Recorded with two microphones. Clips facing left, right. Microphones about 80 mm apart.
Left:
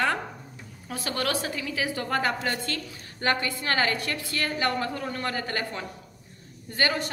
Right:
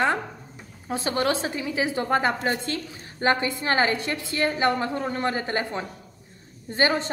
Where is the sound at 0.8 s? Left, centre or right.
Right.